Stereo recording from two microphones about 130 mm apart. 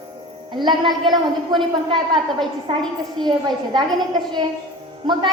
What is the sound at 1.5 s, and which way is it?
A woman's voice, 40° right (ahead or behind).